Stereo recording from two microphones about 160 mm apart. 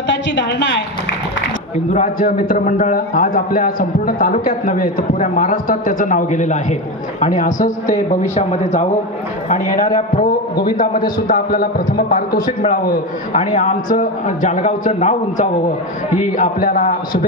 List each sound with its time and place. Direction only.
0.1 s a woman's voice: 90° left
1.9 s a man's voice: 55° left (ahead or behind)
10.5 s a man's voice: 25° left (ahead or behind)
11.1 s a man's voice: 65° left (ahead or behind); by 15.4 s 45° left (ahead or behind)
16.3 s a man's voice: 65° left (ahead or behind)